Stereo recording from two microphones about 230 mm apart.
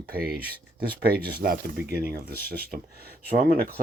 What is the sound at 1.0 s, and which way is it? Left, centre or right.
Speech, right.